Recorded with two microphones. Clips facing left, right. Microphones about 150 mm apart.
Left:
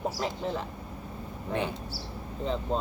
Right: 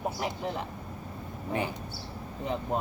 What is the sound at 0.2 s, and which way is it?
Speech, 15° right (ahead or behind).